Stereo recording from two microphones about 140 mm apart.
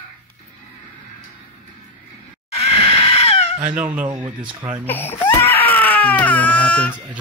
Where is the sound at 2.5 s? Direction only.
45° left (ahead or behind).